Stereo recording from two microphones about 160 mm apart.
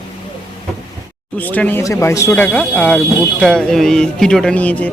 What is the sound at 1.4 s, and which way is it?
Speech, 10° left (ahead or behind).